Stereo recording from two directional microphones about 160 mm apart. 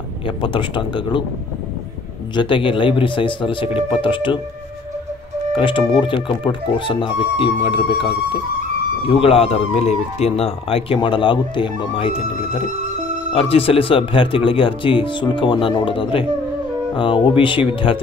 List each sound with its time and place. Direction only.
0.4 s speech: 30° left (ahead or behind)
2.3 s speech: 30° left (ahead or behind)
5.6 s speech: 30° left (ahead or behind)
13.3 s speech: 35° left (ahead or behind)